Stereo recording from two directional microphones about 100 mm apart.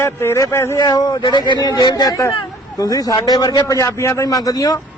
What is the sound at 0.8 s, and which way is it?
A man's voice, 45° left (ahead or behind).